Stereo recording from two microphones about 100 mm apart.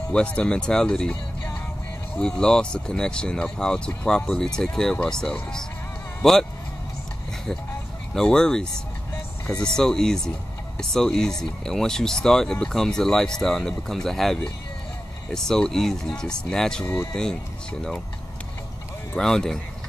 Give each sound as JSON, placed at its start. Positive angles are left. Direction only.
{"t": 0.1, "sound": "speech", "side_deg": 10}
{"t": 2.1, "sound": "speech", "side_deg": 10}
{"t": 8.1, "sound": "speech", "side_deg": 5}
{"t": 16.8, "sound": "speech", "side_deg": 25}
{"t": 17.1, "sound": "speech", "side_deg": 5}
{"t": 19.1, "sound": "speech", "side_deg": 5}